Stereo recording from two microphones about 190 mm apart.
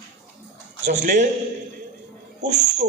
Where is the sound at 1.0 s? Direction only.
45° right (ahead or behind).